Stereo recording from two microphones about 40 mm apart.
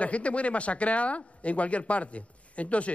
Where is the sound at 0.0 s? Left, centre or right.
Left.